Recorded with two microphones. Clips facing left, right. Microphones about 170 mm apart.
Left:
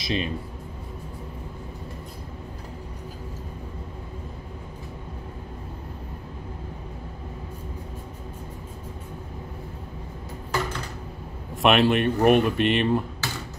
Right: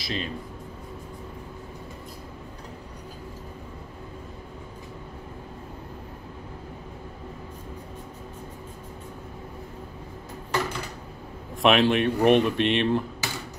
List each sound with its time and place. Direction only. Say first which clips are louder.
0.0 s speech: left 4 dB; 20° left (ahead or behind)
11.5 s a man's voice: left 1 dB; centre (ahead or behind)
13.2 s a sound: left 1 dB; 15° right (ahead or behind)